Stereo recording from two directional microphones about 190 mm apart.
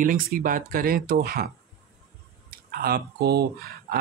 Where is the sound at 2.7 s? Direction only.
55° right (ahead or behind).